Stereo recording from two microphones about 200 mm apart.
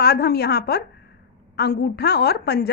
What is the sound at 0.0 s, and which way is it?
A woman's voice, 55° left (ahead or behind).